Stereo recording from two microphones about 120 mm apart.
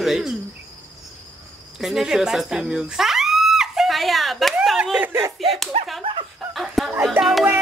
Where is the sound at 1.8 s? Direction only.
5° right (ahead or behind).